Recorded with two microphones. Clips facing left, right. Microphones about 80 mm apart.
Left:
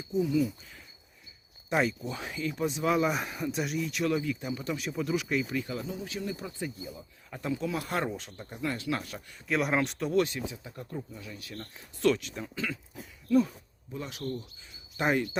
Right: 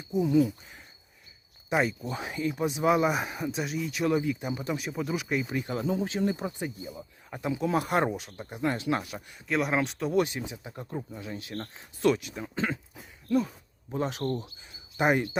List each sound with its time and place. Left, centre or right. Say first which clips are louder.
0.1 s speech: right 4 dB; right
1.7 s speech: right 1 dB; centre
4.0 s speech: right 4 dB; centre
5.4 s speech: right 1 dB; right
5.7 s speech: right 7 dB; right
6.3 s speech: right 3 dB; right
8.1 s speech: right 3 dB; centre
9.5 s speech: right 1 dB; centre
10.2 s speech: even; centre
11.9 s speech: right 1 dB; centre
12.5 s speech: right 5 dB; right
13.9 s speech: right 8 dB; right
14.9 s speech: right 3 dB; centre